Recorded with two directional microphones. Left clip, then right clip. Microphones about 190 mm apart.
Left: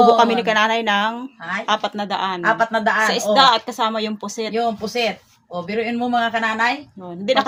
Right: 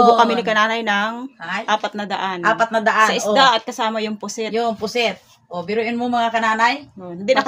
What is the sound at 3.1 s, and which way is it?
Speech, centre (ahead or behind).